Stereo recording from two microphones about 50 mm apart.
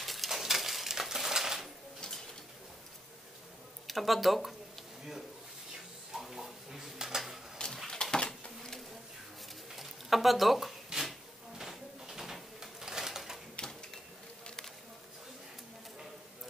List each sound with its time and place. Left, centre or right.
0.0 s crushing: centre
2.0 s bird: centre
3.8 s speech: centre
6.1 s dishes: centre
7.6 s a sound: centre
7.9 s bird: centre
9.7 s a sound: centre